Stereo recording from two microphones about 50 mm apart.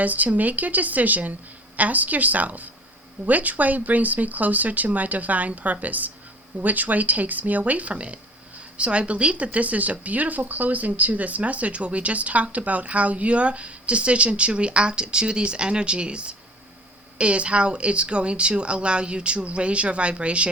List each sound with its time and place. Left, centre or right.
0.0 s speech: right